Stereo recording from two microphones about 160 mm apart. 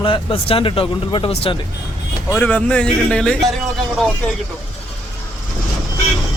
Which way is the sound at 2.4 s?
10° left (ahead or behind).